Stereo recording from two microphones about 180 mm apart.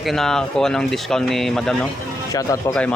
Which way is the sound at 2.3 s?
20° left (ahead or behind).